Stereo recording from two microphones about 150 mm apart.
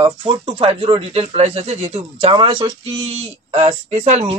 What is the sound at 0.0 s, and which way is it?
Speech, 35° right (ahead or behind).